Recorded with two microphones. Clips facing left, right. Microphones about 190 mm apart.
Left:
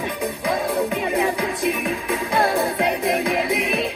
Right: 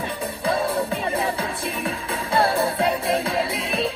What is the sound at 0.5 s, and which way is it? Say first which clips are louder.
Music: even; 15° left (ahead or behind).